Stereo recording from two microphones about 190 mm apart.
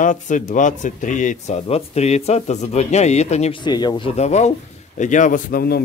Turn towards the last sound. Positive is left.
turn(degrees=50)  # may be behind; listen again after turning